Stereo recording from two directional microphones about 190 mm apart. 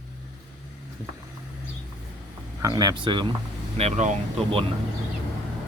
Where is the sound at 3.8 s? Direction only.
35° right (ahead or behind).